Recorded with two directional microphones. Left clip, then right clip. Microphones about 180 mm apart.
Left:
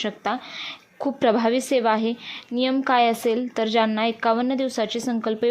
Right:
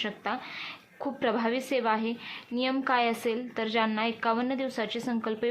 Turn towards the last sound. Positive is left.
turn(degrees=35)  # may be behind; listen again after turning